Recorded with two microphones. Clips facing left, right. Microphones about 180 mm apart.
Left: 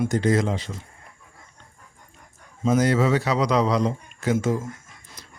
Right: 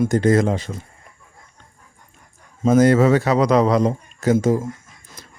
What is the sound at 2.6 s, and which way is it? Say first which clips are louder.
A man's voice: right 6 dB; 50° right (ahead or behind).